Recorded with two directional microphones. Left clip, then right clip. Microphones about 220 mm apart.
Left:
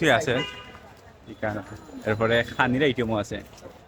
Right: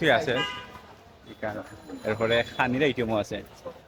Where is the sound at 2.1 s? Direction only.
10° left (ahead or behind).